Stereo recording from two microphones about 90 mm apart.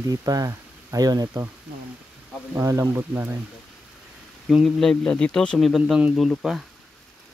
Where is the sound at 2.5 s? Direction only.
30° right (ahead or behind).